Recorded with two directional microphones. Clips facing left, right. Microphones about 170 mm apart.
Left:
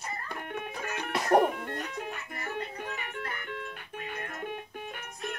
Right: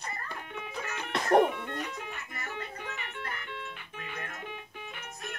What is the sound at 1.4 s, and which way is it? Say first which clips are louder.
Music: left 1 dB; 45° left (ahead or behind).